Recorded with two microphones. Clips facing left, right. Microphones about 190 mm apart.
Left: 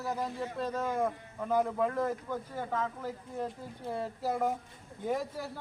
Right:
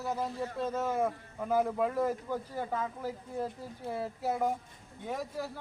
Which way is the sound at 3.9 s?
5° right (ahead or behind).